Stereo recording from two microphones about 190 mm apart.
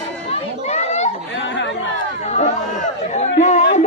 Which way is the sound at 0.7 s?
35° left (ahead or behind).